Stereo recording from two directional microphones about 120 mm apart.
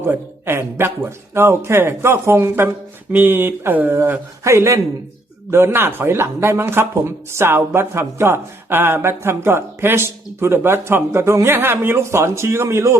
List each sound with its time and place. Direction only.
0.0 s speech: 20° right (ahead or behind)